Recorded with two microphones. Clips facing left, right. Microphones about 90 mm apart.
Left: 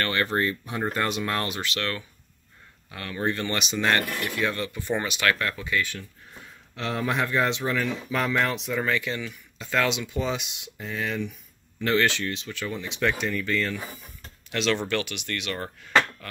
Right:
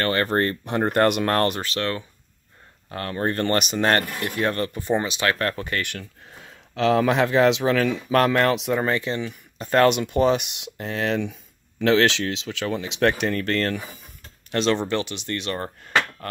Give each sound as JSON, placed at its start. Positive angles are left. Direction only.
{"t": 0.0, "sound": "speech", "side_deg": -40}
{"t": 1.6, "sound": "speech", "side_deg": -35}
{"t": 2.9, "sound": "speech", "side_deg": -40}
{"t": 4.0, "sound": "speech", "side_deg": -25}
{"t": 4.3, "sound": "speech", "side_deg": -50}
{"t": 4.9, "sound": "speech", "side_deg": -25}
{"t": 5.4, "sound": "speech", "side_deg": -50}
{"t": 8.8, "sound": "speech", "side_deg": -35}
{"t": 9.6, "sound": "speech", "side_deg": -50}
{"t": 11.8, "sound": "speech", "side_deg": -90}
{"t": 13.2, "sound": "speech", "side_deg": -70}
{"t": 14.5, "sound": "speech", "side_deg": -35}